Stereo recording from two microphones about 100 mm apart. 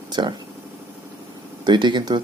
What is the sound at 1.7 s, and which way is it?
Speech, 50° right (ahead or behind).